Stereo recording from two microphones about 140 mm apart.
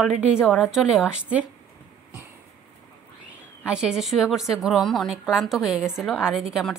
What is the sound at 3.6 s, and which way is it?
A woman's voice, 5° right (ahead or behind).